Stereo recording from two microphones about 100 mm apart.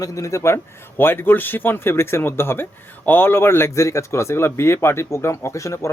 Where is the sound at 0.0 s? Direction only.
30° left (ahead or behind).